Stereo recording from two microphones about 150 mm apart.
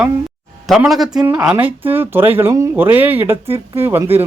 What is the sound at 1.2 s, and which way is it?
Speech, 25° right (ahead or behind).